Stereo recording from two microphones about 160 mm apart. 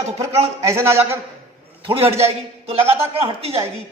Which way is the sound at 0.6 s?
15° right (ahead or behind).